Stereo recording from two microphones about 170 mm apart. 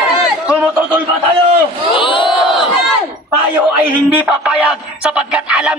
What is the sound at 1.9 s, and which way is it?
Battle cry, 30° left (ahead or behind).